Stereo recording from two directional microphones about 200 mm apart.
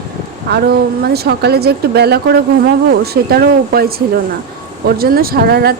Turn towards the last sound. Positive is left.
turn(degrees=-50)  # may be behind; listen again after turning